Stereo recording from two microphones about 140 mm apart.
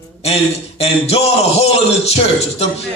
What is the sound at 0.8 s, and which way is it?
A man's voice, 45° left (ahead or behind).